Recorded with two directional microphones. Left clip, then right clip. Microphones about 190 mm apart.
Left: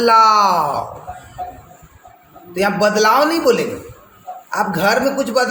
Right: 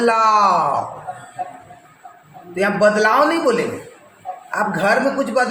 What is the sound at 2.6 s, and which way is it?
Speech, 30° left (ahead or behind).